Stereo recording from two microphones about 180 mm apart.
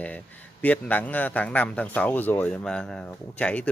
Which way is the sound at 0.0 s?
10° left (ahead or behind).